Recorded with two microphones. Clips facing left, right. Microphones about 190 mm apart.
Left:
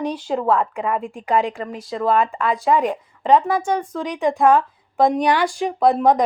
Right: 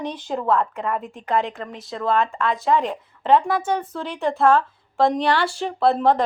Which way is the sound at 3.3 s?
5° right (ahead or behind).